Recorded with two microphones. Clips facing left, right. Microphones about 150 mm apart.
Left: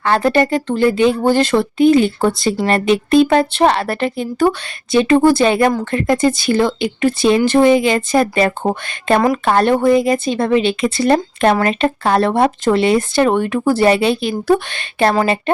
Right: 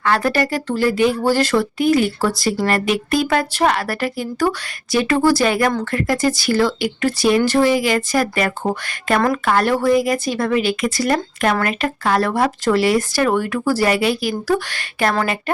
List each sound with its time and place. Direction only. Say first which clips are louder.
0.0 s speech: left 4 dB; 25° left (ahead or behind)